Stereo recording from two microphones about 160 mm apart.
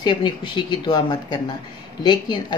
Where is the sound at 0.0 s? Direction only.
30° left (ahead or behind).